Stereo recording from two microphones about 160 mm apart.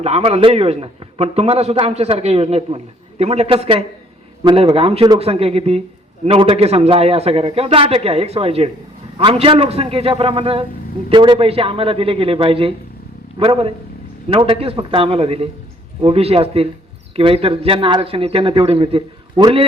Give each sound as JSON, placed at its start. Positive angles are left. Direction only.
{"t": 0.0, "sound": "a man's voice", "side_deg": -40}